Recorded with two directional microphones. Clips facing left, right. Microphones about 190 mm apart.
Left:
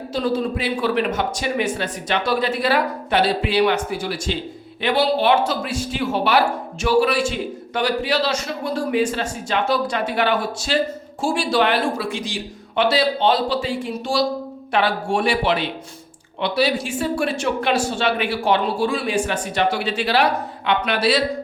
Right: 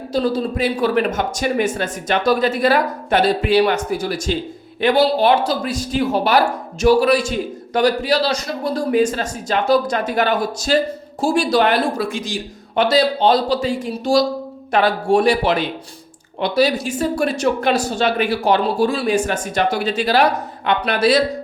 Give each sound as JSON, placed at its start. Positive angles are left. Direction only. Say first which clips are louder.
{"t": 0.1, "sound": "a man's voice", "louder": "right 2 dB", "side_deg": -40}